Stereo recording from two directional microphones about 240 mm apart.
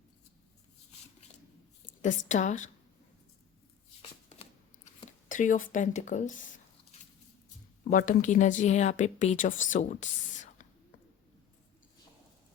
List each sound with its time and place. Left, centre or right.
2.0 s a woman's voice: left
5.3 s a woman's voice: left
7.9 s a woman's voice: left
9.6 s whispering: left